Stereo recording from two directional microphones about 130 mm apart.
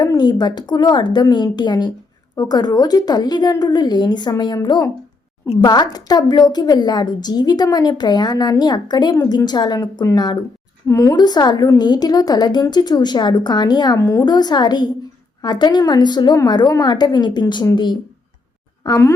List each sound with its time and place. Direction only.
0.0 s a woman's voice: 30° left (ahead or behind)
18.8 s speech: 25° left (ahead or behind)